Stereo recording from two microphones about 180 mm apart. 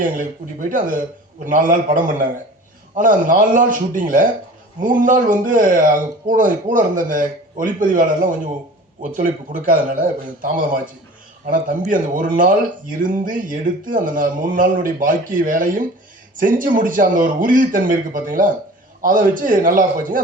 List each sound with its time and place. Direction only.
0.0 s speech: 45° right (ahead or behind)